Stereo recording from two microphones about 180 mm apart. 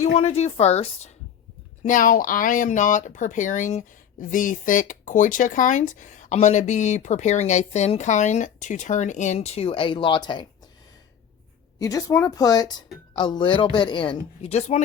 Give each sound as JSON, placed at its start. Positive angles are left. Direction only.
{"t": 0.0, "sound": "a woman's voice", "side_deg": 35}
{"t": 11.8, "sound": "speech", "side_deg": 20}